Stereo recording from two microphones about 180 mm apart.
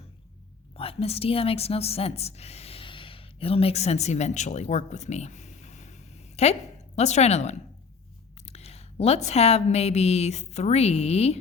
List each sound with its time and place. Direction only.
0.8 s a woman's voice: 30° left (ahead or behind)